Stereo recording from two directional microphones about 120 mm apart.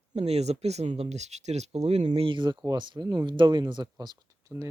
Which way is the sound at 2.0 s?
45° right (ahead or behind).